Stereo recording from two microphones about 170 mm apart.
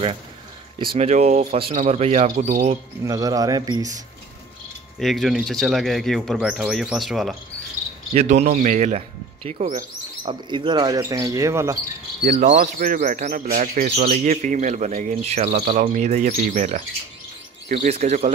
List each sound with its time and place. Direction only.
0.7 s speech: 35° right (ahead or behind)
3.0 s speech: 20° right (ahead or behind)
4.9 s speech: centre (ahead or behind)
8.1 s speech: 40° right (ahead or behind)
10.2 s speech: 30° right (ahead or behind)
12.2 s speech: 45° right (ahead or behind)